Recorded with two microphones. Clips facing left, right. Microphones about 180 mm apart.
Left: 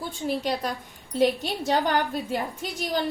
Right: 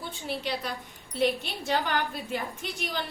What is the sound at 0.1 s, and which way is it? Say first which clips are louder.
A woman's voice: left 6 dB; 45° left (ahead or behind).